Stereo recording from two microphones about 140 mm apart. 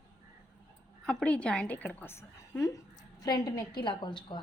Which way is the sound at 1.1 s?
5° left (ahead or behind).